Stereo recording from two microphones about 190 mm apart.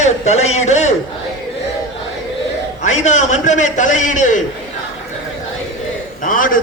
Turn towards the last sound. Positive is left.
turn(degrees=45)  # may be behind; listen again after turning